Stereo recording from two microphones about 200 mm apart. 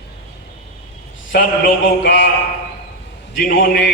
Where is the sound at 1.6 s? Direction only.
65° left (ahead or behind).